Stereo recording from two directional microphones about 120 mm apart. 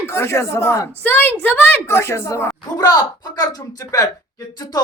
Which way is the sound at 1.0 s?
15° left (ahead or behind).